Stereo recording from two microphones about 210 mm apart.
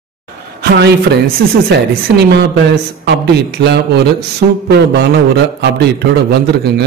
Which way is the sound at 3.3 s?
50° right (ahead or behind).